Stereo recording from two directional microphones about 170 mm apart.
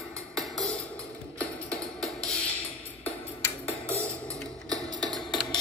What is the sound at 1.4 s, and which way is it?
Music, 5° left (ahead or behind).